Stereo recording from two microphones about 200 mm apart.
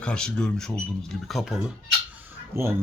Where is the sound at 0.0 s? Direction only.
5° left (ahead or behind).